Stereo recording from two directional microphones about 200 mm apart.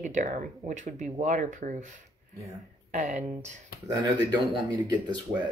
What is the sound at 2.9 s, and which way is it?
Speech, 35° right (ahead or behind).